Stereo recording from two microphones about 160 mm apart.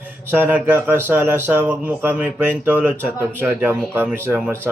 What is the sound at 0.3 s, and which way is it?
Speech, 10° right (ahead or behind).